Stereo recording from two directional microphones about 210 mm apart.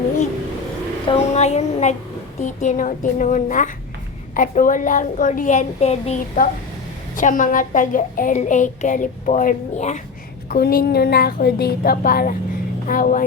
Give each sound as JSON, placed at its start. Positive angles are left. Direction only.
{"t": 1.0, "sound": "a woman's voice", "side_deg": 30}
{"t": 10.5, "sound": "a woman's voice", "side_deg": 45}